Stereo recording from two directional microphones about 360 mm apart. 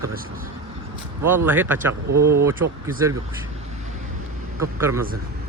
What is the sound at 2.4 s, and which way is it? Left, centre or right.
Speech, centre.